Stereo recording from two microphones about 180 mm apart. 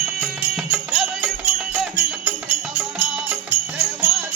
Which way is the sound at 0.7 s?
5° right (ahead or behind).